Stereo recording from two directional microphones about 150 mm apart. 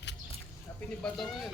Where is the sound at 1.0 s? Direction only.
Centre (ahead or behind).